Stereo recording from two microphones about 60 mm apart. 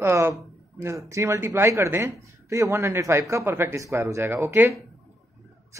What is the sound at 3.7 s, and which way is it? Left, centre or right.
Speech, right.